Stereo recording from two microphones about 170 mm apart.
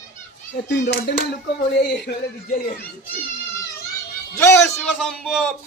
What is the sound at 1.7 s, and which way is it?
A man's voice, 70° left (ahead or behind).